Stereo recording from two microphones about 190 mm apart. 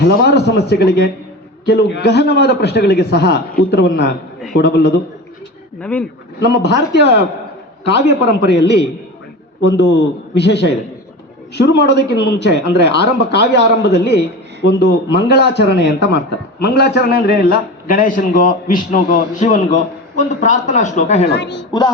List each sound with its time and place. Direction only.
0.0 s a man's voice: 60° left (ahead or behind)
5.8 s speech: 5° left (ahead or behind)
6.4 s a man's voice: 60° left (ahead or behind); by 21.2 s 40° left (ahead or behind)
21.2 s a man's voice: 60° left (ahead or behind)
21.7 s music: 20° left (ahead or behind)